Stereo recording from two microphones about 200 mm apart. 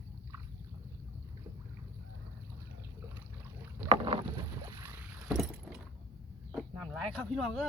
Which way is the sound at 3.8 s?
30° right (ahead or behind).